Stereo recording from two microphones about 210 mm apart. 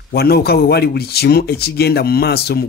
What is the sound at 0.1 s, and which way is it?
Speech, 50° left (ahead or behind).